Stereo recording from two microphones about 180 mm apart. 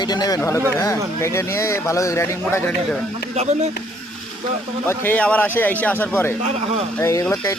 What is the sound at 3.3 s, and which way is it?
Speech, 40° right (ahead or behind).